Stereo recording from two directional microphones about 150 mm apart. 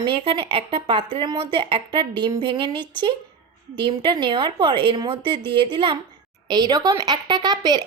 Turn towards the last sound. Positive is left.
turn(degrees=-25)  # may be behind; listen again after turning